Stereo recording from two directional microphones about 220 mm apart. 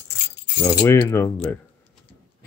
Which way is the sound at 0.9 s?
10° left (ahead or behind).